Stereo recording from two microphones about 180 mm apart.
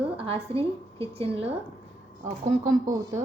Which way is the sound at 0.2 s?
30° right (ahead or behind).